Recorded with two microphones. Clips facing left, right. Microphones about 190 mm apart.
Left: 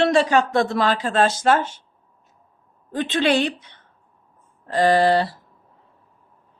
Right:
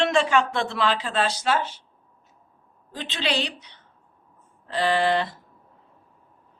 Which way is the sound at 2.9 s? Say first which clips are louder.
Left 8 dB; 55° left (ahead or behind).